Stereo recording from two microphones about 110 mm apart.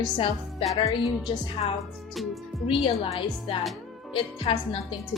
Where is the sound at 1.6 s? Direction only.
65° left (ahead or behind).